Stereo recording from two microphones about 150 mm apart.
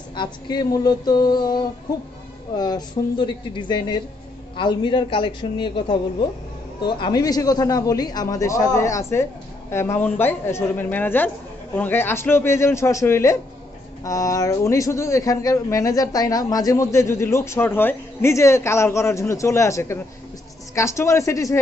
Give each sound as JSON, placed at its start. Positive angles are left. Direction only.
{"t": 0.1, "sound": "a man's voice", "side_deg": 30}